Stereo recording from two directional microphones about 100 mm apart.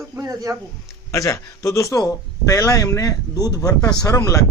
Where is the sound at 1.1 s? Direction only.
30° left (ahead or behind).